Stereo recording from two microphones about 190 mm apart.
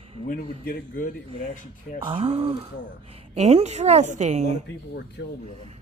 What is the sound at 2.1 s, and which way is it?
A woman's voice, 30° right (ahead or behind).